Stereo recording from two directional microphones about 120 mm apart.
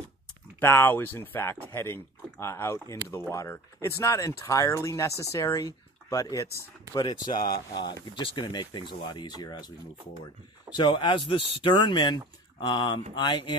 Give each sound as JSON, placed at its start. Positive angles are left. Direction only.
{"t": 0.6, "sound": "speech", "side_deg": 20}
{"t": 10.7, "sound": "speech", "side_deg": 40}